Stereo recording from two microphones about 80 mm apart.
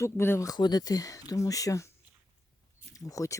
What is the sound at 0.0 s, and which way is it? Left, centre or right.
Speech, left.